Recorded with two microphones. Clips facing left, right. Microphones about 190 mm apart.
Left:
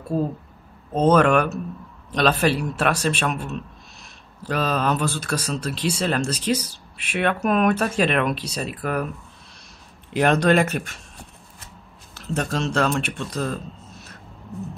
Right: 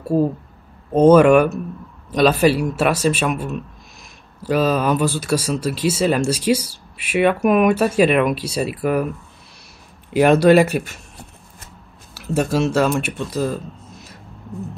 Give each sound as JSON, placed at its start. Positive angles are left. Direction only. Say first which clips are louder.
{"t": 0.9, "sound": "speech", "louder": "right 6 dB", "side_deg": -10}
{"t": 10.1, "sound": "speech", "louder": "right 6 dB", "side_deg": -5}
{"t": 12.1, "sound": "speech", "louder": "right 6 dB", "side_deg": -10}